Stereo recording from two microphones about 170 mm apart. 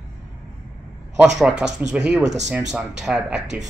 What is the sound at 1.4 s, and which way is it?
A man's voice, 5° right (ahead or behind).